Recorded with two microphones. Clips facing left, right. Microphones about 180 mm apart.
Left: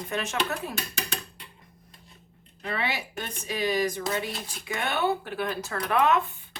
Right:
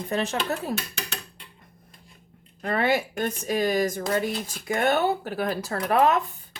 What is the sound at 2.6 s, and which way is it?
Speech, 50° right (ahead or behind).